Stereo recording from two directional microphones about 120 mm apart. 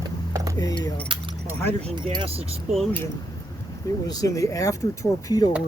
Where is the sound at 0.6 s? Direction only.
30° left (ahead or behind).